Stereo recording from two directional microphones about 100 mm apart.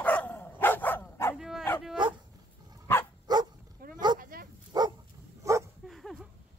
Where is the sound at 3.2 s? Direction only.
45° right (ahead or behind).